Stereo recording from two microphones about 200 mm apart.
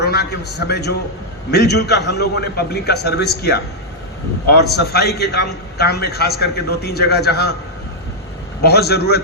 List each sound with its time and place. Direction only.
0.0 s a man's voice: 55° left (ahead or behind)
4.4 s a man's voice: 55° left (ahead or behind)
8.6 s a man's voice: 55° left (ahead or behind)